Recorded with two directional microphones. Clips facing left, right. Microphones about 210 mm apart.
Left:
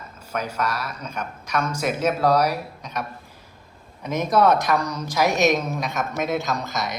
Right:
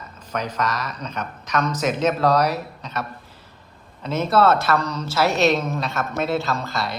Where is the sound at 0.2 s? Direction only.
10° left (ahead or behind).